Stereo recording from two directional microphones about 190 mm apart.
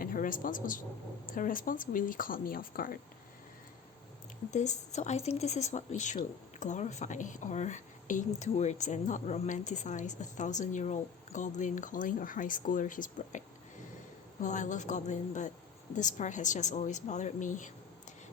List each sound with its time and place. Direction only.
0.0 s a man's voice: 45° left (ahead or behind)
4.5 s speech: 40° left (ahead or behind)
14.4 s speech: 40° left (ahead or behind)